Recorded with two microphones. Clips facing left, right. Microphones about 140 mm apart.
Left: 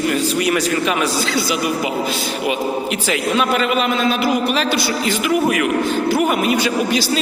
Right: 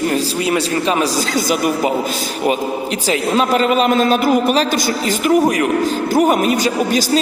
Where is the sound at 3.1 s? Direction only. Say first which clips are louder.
Right 3 dB; 35° right (ahead or behind).